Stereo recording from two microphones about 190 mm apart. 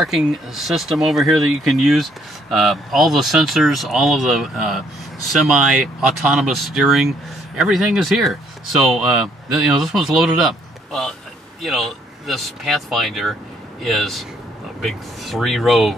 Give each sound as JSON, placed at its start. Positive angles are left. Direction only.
{"t": 0.0, "sound": "speech", "side_deg": 0}